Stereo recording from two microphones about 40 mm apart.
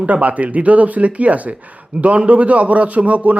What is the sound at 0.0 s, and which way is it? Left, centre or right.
Speech, right.